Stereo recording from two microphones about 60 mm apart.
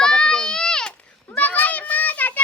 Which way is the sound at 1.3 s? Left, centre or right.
Left.